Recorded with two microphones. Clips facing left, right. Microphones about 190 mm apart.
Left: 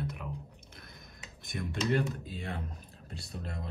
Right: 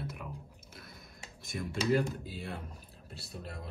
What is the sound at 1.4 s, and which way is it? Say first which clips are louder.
A man's voice: left 1 dB; centre (ahead or behind).